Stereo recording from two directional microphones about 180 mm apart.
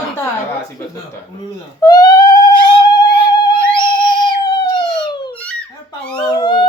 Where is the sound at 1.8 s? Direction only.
20° left (ahead or behind).